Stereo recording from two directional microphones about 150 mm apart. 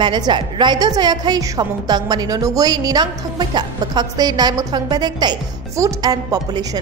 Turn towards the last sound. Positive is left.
turn(degrees=-25)  # may be behind; listen again after turning